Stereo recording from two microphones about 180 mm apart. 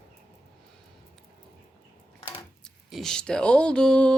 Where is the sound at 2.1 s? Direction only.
30° left (ahead or behind).